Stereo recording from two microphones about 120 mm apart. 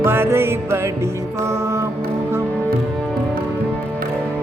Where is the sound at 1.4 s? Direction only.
25° right (ahead or behind).